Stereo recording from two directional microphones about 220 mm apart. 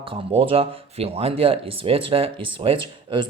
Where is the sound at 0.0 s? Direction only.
25° right (ahead or behind).